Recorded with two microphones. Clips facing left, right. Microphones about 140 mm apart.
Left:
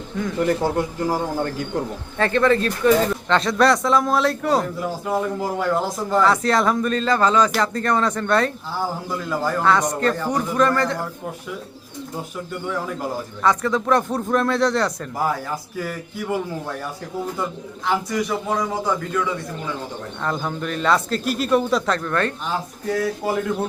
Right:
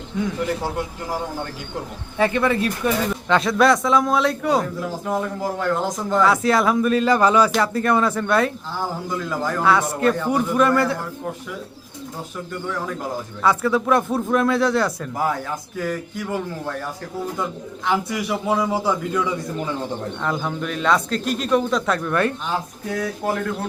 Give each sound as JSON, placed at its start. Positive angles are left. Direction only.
{"t": 2.1, "sound": "a man's voice", "side_deg": -10}
{"t": 13.4, "sound": "speech", "side_deg": -5}
{"t": 17.8, "sound": "speech", "side_deg": -5}
{"t": 21.9, "sound": "a man's voice", "side_deg": -10}
{"t": 22.4, "sound": "speech", "side_deg": 0}